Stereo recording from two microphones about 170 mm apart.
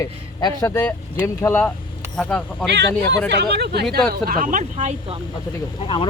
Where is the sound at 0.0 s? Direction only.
20° left (ahead or behind).